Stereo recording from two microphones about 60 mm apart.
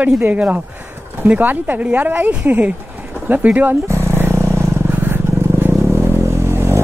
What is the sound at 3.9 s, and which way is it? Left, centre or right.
Vehicle, right.